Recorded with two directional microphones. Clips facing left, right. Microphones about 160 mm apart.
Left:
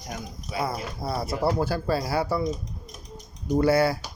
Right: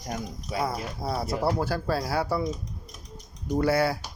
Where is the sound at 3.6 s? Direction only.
Centre (ahead or behind).